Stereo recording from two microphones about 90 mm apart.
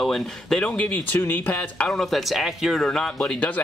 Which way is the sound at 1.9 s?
5° left (ahead or behind).